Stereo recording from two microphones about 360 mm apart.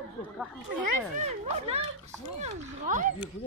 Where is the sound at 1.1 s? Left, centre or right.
Centre.